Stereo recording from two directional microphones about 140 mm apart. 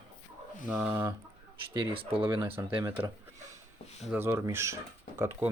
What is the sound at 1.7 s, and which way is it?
Speech, 35° right (ahead or behind).